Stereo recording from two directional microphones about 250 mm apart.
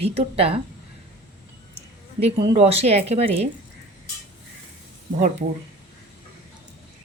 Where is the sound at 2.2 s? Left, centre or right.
Right.